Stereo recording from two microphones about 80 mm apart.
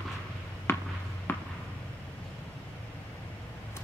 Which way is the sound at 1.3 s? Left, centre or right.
Left.